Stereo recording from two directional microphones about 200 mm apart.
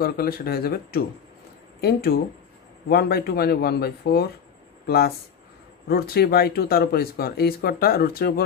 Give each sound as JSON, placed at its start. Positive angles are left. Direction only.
{"t": 0.0, "sound": "speech", "side_deg": 50}